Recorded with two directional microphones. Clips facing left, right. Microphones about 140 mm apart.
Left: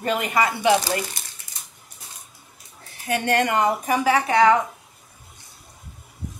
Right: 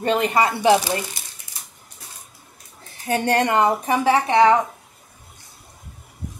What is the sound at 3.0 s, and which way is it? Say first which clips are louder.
A woman's voice: right 2 dB; 30° right (ahead or behind).